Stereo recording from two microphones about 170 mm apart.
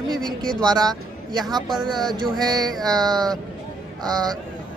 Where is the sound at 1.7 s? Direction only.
Centre (ahead or behind).